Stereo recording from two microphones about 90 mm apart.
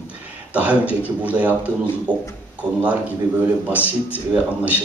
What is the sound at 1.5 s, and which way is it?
Speech, 20° left (ahead or behind).